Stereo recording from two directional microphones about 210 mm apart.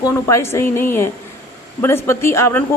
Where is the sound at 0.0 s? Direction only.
15° left (ahead or behind).